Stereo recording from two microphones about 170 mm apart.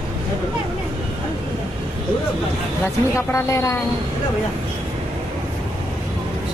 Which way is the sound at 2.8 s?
15° left (ahead or behind).